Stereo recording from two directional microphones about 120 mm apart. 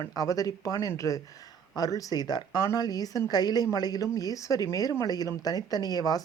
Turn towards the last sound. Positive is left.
turn(degrees=30)  # may be behind; listen again after turning